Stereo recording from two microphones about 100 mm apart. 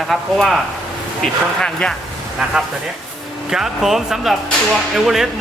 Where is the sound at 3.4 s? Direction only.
5° right (ahead or behind).